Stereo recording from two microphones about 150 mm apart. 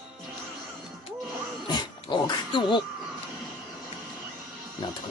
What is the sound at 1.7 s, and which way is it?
Dog, 30° left (ahead or behind).